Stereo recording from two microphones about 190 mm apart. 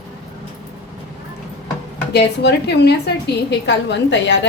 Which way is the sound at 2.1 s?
60° left (ahead or behind).